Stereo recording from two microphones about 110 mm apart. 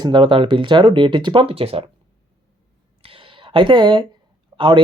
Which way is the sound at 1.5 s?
65° right (ahead or behind).